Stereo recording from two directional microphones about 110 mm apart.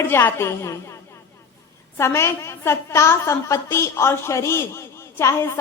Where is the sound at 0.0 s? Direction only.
20° left (ahead or behind).